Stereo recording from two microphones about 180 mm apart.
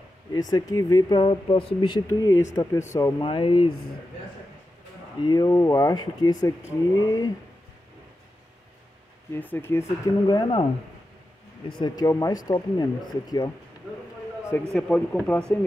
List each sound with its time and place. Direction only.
0.3 s speech: 20° left (ahead or behind)
2.0 s speech: 15° left (ahead or behind)
3.2 s speech: 30° left (ahead or behind)
5.2 s speech: 20° left (ahead or behind)
9.3 s speech: 10° left (ahead or behind)
14.7 s speech: 5° left (ahead or behind)